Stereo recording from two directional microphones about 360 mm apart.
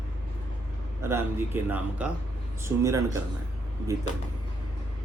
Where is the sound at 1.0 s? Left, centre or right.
Centre.